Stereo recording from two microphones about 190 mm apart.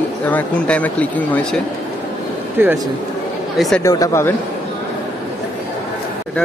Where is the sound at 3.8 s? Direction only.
15° left (ahead or behind).